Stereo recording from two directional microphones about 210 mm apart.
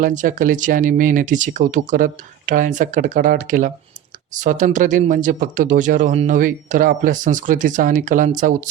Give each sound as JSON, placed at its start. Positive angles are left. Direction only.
{"t": 0.0, "sound": "speech", "side_deg": -40}